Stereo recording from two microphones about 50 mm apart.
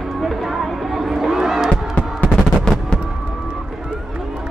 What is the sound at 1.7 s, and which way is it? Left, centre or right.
Music, left.